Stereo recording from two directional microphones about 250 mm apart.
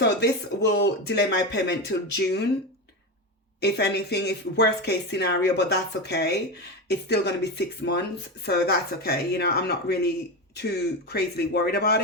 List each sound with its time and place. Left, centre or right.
0.0 s speech: left
3.6 s a woman's voice: left